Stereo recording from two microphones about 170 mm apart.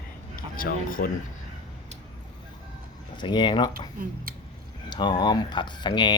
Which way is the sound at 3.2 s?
25° left (ahead or behind).